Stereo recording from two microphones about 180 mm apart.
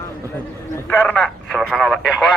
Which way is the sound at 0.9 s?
10° left (ahead or behind).